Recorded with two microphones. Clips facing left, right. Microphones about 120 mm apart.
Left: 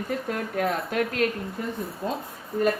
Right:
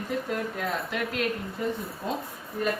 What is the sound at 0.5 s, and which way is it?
Speech, 50° left (ahead or behind).